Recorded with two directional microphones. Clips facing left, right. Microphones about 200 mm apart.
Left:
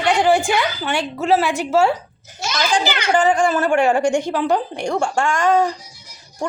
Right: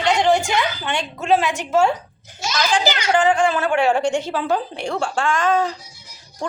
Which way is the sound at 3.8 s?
10° left (ahead or behind).